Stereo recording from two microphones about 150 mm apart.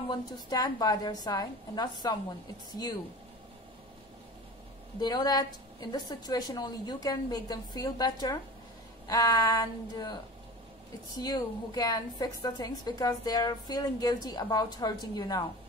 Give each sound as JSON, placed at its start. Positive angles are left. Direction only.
{"t": 0.1, "sound": "a woman's voice", "side_deg": 25}
{"t": 5.0, "sound": "a woman's voice", "side_deg": 25}
{"t": 11.1, "sound": "a woman's voice", "side_deg": 25}